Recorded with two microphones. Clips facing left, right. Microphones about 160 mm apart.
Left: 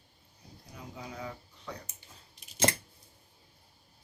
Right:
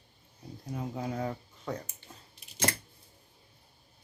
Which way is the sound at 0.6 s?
50° right (ahead or behind).